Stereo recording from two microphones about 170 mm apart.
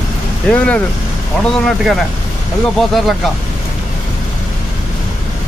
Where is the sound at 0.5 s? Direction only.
10° left (ahead or behind).